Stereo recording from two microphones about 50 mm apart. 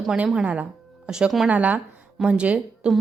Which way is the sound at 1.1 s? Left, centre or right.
Centre.